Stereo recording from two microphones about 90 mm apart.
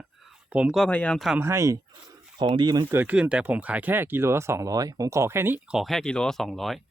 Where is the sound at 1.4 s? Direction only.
30° right (ahead or behind).